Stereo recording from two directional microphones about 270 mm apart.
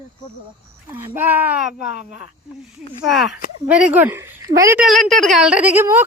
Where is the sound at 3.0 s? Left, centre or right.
Centre.